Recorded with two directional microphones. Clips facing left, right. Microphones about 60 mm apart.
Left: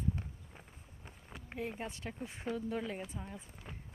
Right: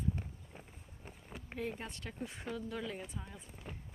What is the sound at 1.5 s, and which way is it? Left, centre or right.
Speech, centre.